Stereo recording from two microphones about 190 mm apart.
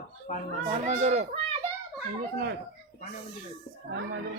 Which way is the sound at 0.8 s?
40° right (ahead or behind).